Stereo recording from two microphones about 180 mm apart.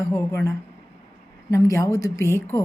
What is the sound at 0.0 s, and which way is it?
A woman's voice, 15° left (ahead or behind).